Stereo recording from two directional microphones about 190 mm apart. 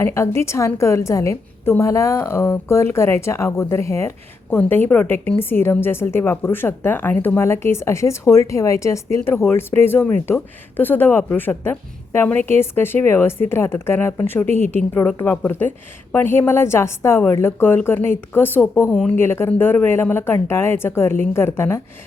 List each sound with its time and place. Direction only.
0.0 s speech: 15° left (ahead or behind)